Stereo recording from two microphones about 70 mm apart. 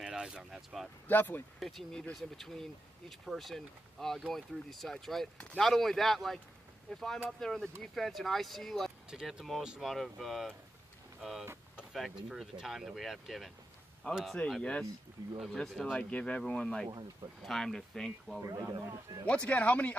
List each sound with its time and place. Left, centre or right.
0.0 s speech: centre
1.0 s speech: left
1.6 s speech: centre
9.1 s speech: centre
14.6 s speech: centre
15.9 s speech: centre
18.7 s speech: right
19.2 s speech: centre